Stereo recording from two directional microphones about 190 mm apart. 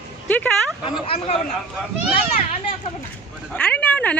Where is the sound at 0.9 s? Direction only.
30° left (ahead or behind).